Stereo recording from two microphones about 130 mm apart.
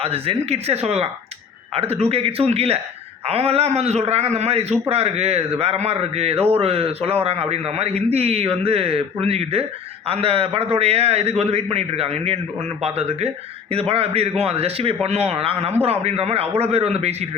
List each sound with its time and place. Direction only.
0.0 s a man's voice: 50° right (ahead or behind)